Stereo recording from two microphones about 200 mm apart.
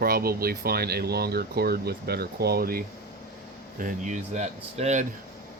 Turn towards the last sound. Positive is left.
turn(degrees=-35)  # may be behind; listen again after turning